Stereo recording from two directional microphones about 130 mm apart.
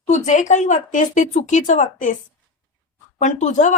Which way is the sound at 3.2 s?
65° left (ahead or behind).